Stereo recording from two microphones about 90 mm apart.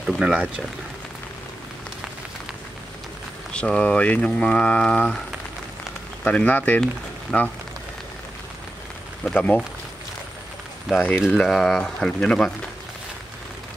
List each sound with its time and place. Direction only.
0.0 s speech: 10° right (ahead or behind)
3.5 s speech: 10° left (ahead or behind)
6.2 s speech: 15° left (ahead or behind)
9.2 s speech: 15° left (ahead or behind)
10.9 s speech: 5° right (ahead or behind)